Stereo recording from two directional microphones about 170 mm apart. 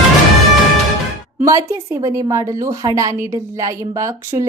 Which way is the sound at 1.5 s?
20° right (ahead or behind).